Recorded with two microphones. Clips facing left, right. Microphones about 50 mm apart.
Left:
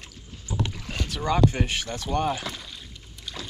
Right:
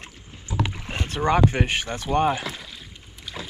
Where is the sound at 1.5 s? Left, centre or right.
Right.